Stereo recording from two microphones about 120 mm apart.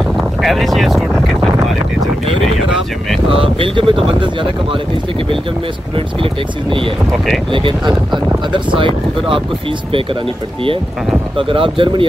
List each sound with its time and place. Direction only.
0.4 s speech: centre (ahead or behind)
3.3 s speech: 45° right (ahead or behind)
7.5 s speech: 45° right (ahead or behind)
11.3 s speech: 45° right (ahead or behind)